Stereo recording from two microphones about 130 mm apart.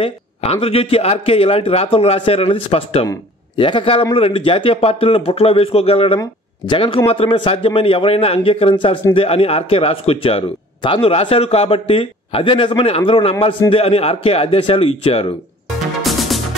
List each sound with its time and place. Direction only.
0.0 s a man's voice: 50° left (ahead or behind)
6.1 s speech: 35° left (ahead or behind)
16.0 s music: centre (ahead or behind)